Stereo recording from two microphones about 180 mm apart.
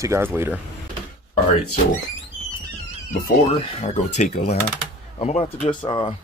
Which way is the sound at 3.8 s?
40° left (ahead or behind).